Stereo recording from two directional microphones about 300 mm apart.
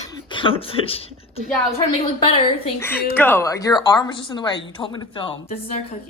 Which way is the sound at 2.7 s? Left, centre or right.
Centre.